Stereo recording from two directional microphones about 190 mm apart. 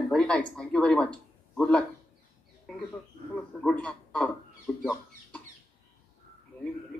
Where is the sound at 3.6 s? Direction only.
5° left (ahead or behind).